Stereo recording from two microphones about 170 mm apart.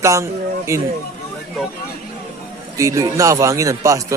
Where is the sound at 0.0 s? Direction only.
15° right (ahead or behind).